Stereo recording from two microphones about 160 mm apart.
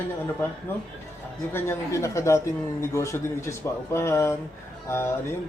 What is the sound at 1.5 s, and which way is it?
A man's voice, 15° left (ahead or behind).